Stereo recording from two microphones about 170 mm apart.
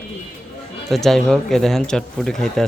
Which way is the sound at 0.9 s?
Centre (ahead or behind).